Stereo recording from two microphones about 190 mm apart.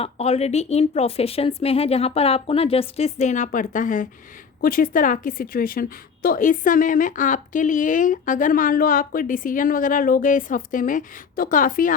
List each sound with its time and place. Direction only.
0.0 s a woman's voice: 35° left (ahead or behind)